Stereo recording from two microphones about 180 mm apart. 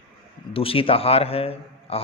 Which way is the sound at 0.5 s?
30° left (ahead or behind).